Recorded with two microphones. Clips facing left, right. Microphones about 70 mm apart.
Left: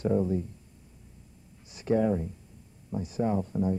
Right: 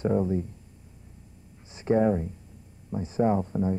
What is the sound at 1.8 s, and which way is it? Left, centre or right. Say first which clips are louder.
Speech: right 3 dB; right.